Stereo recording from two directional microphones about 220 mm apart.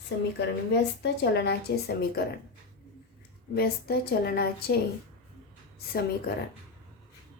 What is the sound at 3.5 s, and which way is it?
A woman's voice, 45° left (ahead or behind).